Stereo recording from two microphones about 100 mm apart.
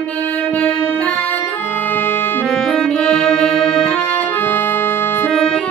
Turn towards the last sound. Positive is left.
turn(degrees=5)  # may be behind; listen again after turning